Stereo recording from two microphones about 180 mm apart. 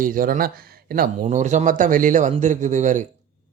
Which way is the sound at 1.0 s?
40° right (ahead or behind).